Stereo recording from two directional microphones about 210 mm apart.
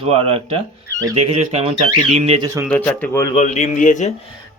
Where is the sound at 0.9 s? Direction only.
15° right (ahead or behind).